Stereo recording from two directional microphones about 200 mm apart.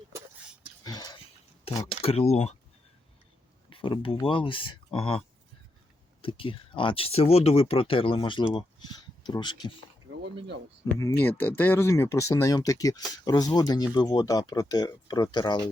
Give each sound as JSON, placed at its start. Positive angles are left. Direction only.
{"t": 0.9, "sound": "a sound", "side_deg": 20}
{"t": 2.0, "sound": "speech", "side_deg": 30}
{"t": 3.7, "sound": "speech", "side_deg": 25}
{"t": 6.2, "sound": "speech", "side_deg": 25}
{"t": 10.8, "sound": "speech", "side_deg": 10}